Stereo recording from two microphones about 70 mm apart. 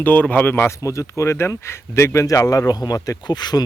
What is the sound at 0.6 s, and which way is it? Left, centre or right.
Speech, left.